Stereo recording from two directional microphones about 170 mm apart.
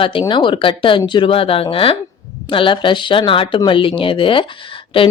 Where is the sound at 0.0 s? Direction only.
30° left (ahead or behind).